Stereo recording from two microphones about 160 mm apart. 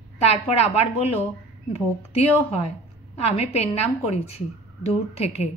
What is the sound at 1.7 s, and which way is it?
A woman's voice, 40° left (ahead or behind).